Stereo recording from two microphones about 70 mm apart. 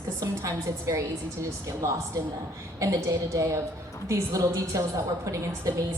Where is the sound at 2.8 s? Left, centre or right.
Right.